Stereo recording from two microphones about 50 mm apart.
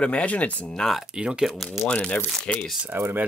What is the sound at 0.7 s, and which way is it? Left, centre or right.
Speech, centre.